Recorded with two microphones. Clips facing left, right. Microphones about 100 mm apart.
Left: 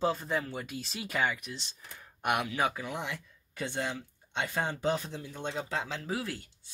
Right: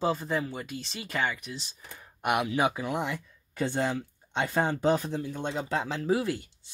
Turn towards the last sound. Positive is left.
turn(degrees=-20)  # may be behind; listen again after turning